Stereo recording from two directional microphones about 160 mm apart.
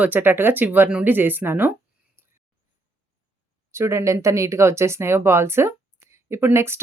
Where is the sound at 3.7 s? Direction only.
15° right (ahead or behind).